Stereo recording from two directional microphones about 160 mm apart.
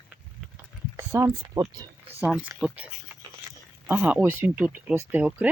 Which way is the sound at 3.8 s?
10° right (ahead or behind).